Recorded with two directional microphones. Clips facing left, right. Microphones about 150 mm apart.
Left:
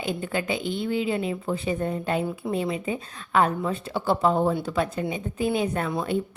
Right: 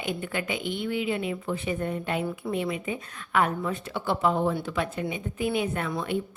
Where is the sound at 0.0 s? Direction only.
35° left (ahead or behind).